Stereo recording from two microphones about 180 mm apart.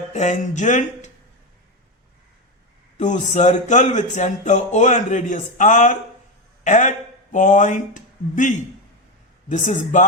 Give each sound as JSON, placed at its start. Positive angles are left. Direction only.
{"t": 0.1, "sound": "speech", "side_deg": 40}
{"t": 3.0, "sound": "speech", "side_deg": 40}